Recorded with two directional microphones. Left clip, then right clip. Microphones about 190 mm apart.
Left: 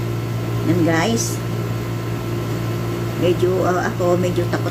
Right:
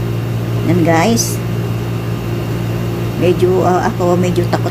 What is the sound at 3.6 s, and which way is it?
Speech, 30° right (ahead or behind).